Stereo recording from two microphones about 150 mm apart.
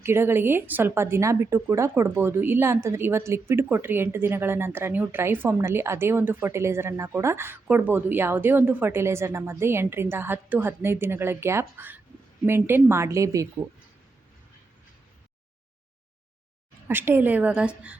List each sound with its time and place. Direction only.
0.0 s a woman's voice: 15° right (ahead or behind)
16.9 s speech: 15° right (ahead or behind)